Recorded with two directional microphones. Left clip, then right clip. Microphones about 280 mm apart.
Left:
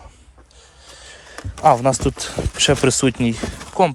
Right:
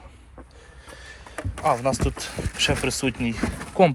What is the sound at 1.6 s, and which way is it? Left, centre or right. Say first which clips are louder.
Speech: left 8 dB; left.